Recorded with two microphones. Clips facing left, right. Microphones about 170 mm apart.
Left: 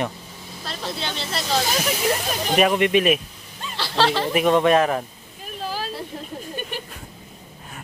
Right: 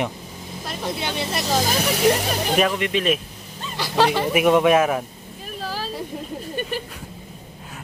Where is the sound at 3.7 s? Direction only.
15° right (ahead or behind).